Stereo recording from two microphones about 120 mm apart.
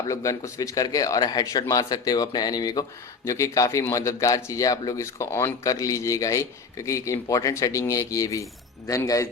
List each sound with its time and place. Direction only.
0.1 s a man's voice: 25° left (ahead or behind)